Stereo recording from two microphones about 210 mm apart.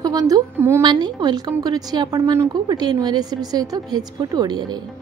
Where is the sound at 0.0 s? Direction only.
15° right (ahead or behind).